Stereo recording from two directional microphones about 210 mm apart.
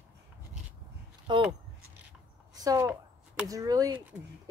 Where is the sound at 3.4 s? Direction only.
15° right (ahead or behind).